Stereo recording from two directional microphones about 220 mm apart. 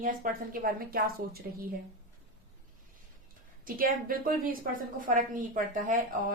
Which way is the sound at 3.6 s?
40° right (ahead or behind).